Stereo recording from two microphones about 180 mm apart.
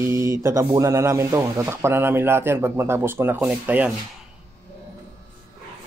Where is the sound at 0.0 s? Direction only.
15° right (ahead or behind).